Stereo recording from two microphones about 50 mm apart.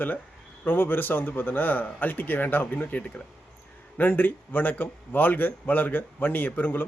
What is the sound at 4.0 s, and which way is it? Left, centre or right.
A man's voice, left.